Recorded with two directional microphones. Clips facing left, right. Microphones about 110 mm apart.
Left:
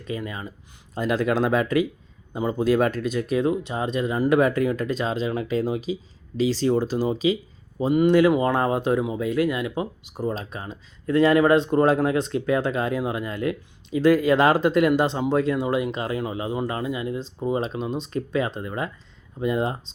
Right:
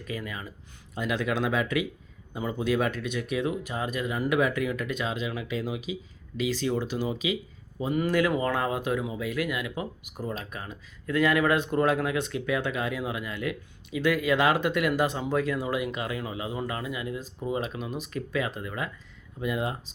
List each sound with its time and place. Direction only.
0.0 s speech: 25° left (ahead or behind)
0.9 s speech: 40° left (ahead or behind)